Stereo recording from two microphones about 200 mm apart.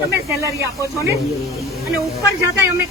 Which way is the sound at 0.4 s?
15° right (ahead or behind).